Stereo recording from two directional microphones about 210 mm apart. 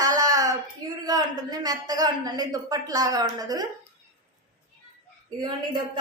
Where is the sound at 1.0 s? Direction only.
20° right (ahead or behind).